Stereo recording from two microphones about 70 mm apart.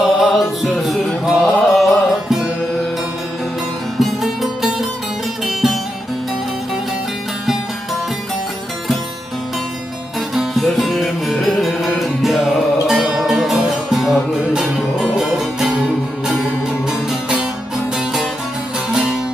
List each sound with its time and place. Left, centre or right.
0.0 s music: centre
3.9 s music: centre
10.3 s music: centre